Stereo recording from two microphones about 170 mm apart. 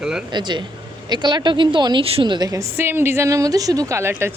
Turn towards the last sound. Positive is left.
turn(degrees=-15)  # may be behind; listen again after turning